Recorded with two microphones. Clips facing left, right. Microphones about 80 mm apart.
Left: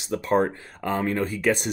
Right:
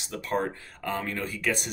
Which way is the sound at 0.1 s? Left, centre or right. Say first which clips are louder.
Left 7 dB; left.